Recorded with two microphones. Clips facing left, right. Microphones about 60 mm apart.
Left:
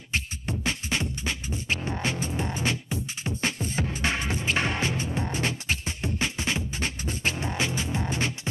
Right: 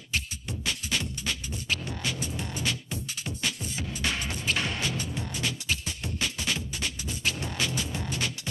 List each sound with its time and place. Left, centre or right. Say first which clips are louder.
0.1 s beatboxing: left 3 dB; left